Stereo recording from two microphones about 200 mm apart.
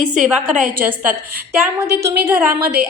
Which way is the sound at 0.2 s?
5° right (ahead or behind).